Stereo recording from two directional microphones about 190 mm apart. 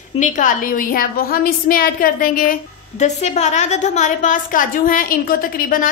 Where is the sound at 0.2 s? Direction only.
45° left (ahead or behind).